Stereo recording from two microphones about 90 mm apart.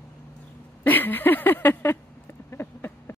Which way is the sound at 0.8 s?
20° left (ahead or behind).